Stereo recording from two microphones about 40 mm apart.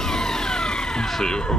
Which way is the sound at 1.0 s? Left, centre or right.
Centre.